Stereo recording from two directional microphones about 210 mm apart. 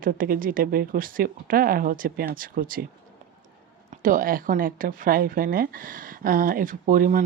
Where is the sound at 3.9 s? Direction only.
40° right (ahead or behind).